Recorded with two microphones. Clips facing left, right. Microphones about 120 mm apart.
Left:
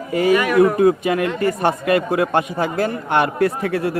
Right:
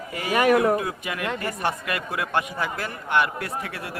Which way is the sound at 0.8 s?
35° left (ahead or behind).